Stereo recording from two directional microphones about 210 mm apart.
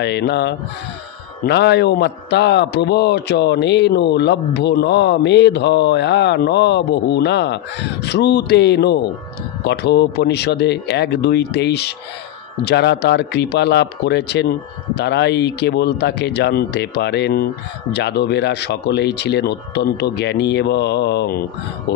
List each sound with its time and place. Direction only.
0.0 s a man's voice: 55° left (ahead or behind)